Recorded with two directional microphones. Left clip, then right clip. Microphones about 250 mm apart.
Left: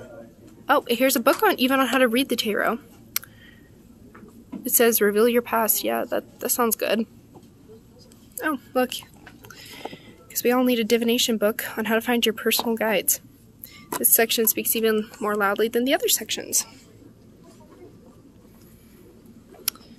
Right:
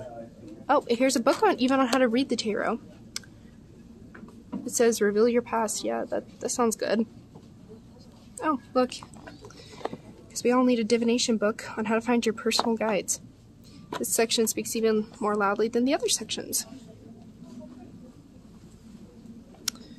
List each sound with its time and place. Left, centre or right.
0.7 s speech: centre
4.6 s speech: centre
8.4 s speech: centre
19.7 s a sound: centre